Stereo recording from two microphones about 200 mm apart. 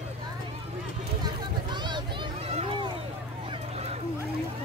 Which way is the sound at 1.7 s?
20° right (ahead or behind).